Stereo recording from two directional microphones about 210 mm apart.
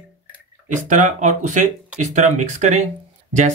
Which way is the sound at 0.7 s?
35° right (ahead or behind).